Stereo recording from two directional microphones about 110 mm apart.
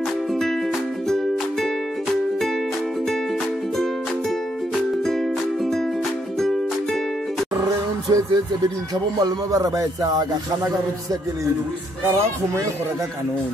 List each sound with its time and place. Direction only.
1.0 s music: 5° left (ahead or behind)
6.4 s music: centre (ahead or behind)
8.1 s speech: 35° right (ahead or behind)